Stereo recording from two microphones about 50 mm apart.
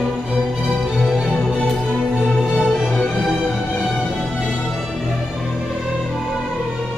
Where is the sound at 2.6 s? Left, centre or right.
Centre.